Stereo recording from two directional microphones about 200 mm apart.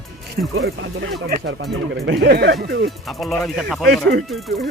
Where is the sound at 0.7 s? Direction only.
55° right (ahead or behind).